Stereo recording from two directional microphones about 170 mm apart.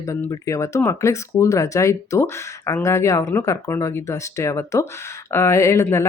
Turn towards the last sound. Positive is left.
turn(degrees=15)  # may be behind; listen again after turning